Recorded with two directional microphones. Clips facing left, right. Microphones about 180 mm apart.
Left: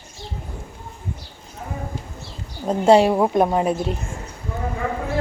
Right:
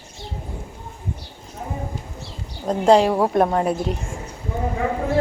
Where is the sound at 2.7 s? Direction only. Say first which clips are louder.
Left 1 dB; 5° left (ahead or behind).